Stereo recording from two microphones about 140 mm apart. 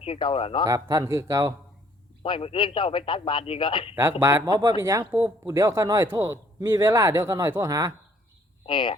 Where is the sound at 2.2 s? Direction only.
40° left (ahead or behind).